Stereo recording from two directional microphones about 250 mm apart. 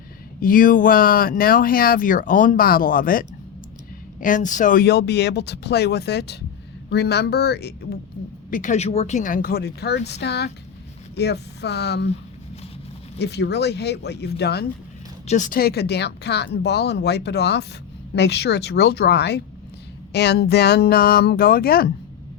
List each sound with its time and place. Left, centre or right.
0.3 s speech: left
13.1 s speech: left